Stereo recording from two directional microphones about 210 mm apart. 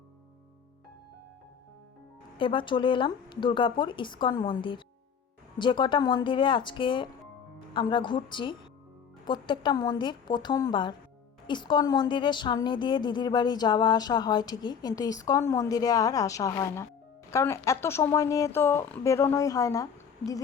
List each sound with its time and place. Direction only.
2.4 s a woman's voice: 25° left (ahead or behind)